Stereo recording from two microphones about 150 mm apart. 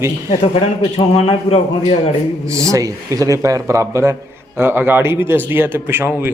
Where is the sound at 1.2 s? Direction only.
40° left (ahead or behind).